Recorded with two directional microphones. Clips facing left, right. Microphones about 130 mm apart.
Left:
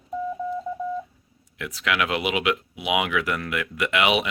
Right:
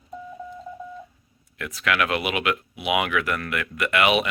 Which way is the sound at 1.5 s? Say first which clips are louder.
Right 1 dB; 15° left (ahead or behind).